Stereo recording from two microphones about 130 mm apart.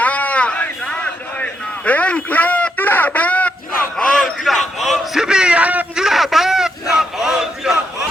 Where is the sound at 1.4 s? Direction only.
10° left (ahead or behind).